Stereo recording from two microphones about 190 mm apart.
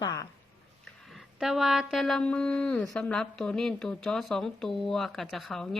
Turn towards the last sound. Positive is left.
turn(degrees=0)  # may be behind; listen again after turning